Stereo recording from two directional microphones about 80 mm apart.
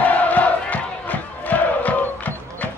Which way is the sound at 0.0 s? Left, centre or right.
Centre.